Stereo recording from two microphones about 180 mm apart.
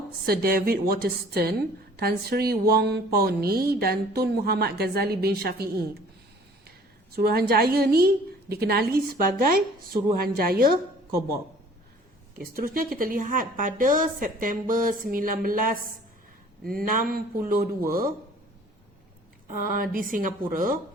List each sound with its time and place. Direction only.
0.3 s a woman's voice: 55° right (ahead or behind)
7.2 s a woman's voice: 60° right (ahead or behind)
12.4 s a woman's voice: 55° right (ahead or behind)
19.5 s a woman's voice: 50° right (ahead or behind)